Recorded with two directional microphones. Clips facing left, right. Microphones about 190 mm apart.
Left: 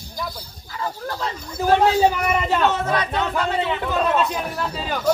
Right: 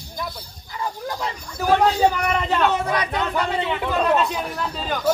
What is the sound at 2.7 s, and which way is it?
Speech, 15° right (ahead or behind).